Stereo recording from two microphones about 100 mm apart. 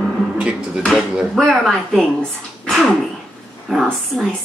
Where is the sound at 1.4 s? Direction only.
5° left (ahead or behind).